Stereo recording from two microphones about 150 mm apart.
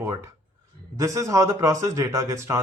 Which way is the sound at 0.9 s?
20° right (ahead or behind).